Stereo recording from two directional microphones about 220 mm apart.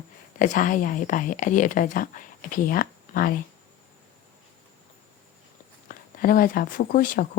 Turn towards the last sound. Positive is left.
turn(degrees=40)  # may be behind; listen again after turning